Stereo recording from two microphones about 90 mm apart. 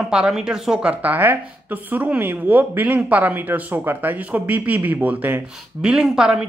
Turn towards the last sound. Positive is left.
turn(degrees=-10)  # may be behind; listen again after turning